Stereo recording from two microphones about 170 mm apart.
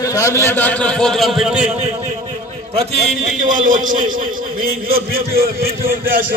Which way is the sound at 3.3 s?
50° right (ahead or behind).